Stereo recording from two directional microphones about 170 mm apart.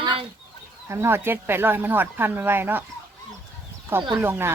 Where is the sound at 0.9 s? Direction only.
15° right (ahead or behind).